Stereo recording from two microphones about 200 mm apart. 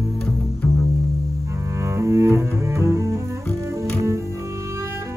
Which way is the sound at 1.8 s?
15° right (ahead or behind).